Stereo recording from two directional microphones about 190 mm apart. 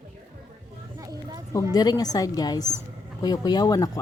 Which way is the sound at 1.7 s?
20° left (ahead or behind).